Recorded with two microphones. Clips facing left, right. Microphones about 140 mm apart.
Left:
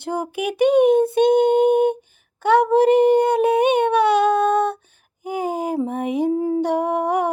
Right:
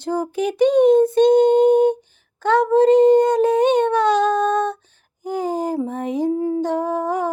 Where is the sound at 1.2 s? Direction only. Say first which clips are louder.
Right 2 dB; 60° left (ahead or behind).